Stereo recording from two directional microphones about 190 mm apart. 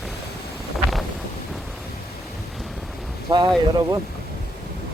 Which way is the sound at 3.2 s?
25° right (ahead or behind).